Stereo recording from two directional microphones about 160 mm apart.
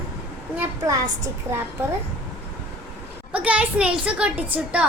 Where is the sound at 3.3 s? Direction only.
10° right (ahead or behind).